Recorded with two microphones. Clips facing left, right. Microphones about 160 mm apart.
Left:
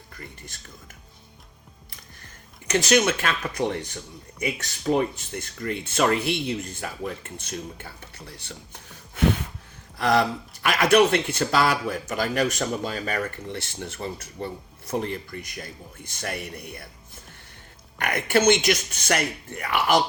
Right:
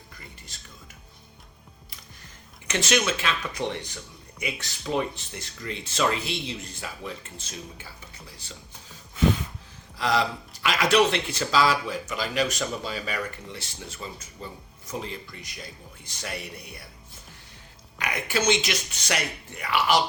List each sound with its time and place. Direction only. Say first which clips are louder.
2.6 s speech: left 5 dB; 40° left (ahead or behind)
17.9 s speech: left 6 dB; 55° left (ahead or behind)